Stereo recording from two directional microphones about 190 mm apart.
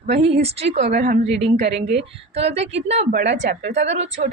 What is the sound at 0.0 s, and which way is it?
A woman's voice, 35° right (ahead or behind).